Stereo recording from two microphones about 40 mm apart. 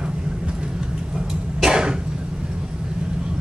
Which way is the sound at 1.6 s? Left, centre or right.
Centre.